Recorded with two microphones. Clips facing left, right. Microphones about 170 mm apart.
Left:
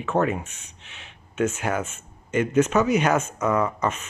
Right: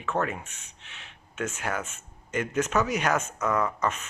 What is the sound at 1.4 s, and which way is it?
Speech, 5° left (ahead or behind).